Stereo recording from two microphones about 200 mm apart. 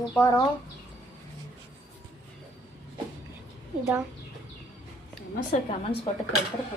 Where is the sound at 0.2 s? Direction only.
15° left (ahead or behind).